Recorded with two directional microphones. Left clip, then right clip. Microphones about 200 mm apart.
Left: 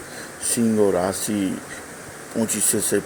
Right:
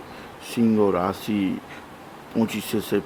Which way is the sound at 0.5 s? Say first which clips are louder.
Left 1 dB; 10° right (ahead or behind).